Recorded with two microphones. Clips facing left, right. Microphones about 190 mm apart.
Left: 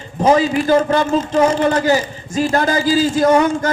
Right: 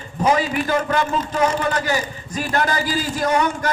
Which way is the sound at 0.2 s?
30° left (ahead or behind).